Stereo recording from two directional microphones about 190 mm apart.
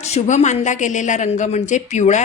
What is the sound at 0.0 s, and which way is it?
A woman's voice, 35° left (ahead or behind).